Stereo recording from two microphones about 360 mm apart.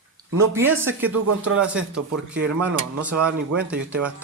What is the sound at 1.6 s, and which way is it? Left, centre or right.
Speech, centre.